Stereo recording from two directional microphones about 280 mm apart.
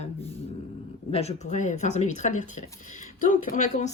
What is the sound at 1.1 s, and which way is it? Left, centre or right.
Speech, left.